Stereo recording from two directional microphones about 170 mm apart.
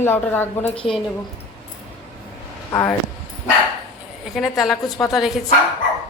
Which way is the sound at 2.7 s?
20° left (ahead or behind).